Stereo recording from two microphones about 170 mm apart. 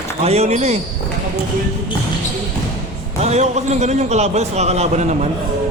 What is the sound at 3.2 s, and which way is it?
A man's voice, 40° right (ahead or behind).